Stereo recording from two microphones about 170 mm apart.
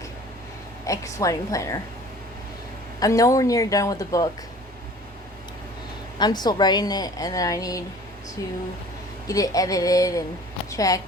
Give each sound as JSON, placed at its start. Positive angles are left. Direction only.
{"t": 0.9, "sound": "speech", "side_deg": 20}
{"t": 3.0, "sound": "speech", "side_deg": 20}
{"t": 6.1, "sound": "speech", "side_deg": 25}
{"t": 9.2, "sound": "speech", "side_deg": 20}